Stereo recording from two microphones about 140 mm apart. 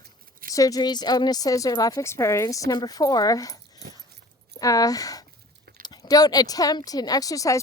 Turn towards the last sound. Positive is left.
turn(degrees=25)  # may be behind; listen again after turning